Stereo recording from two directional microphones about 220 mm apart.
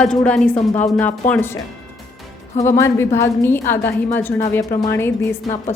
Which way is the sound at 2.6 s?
15° left (ahead or behind).